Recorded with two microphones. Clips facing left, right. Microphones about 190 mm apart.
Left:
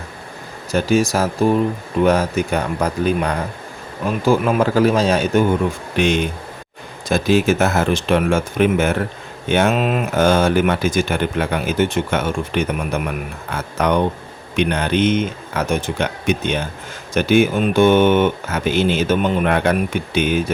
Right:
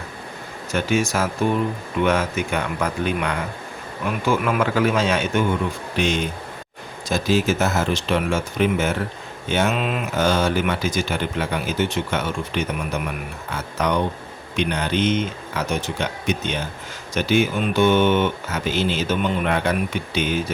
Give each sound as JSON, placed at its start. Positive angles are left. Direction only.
{"t": 0.7, "sound": "a man's voice", "side_deg": 35}
{"t": 6.0, "sound": "speech", "side_deg": 55}